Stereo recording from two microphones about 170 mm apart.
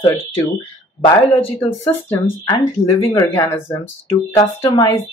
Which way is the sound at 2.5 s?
20° left (ahead or behind).